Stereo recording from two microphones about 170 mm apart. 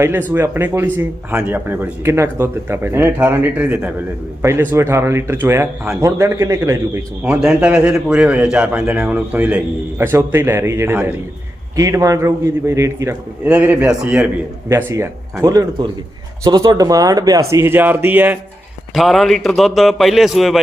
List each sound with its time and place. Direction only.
0.0 s speech: 10° right (ahead or behind)
18.9 s a man's voice: centre (ahead or behind)